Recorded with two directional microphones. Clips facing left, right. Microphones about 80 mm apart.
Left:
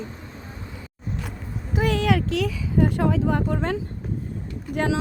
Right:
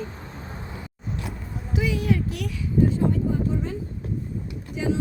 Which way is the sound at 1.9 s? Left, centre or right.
Left.